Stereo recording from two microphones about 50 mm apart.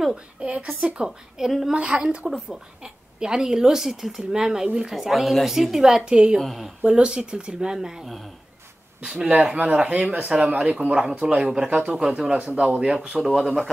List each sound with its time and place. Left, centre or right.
0.1 s speech: right
1.4 s speech: centre
1.7 s speech: centre
6.4 s speech: centre
6.8 s speech: right
13.2 s speech: centre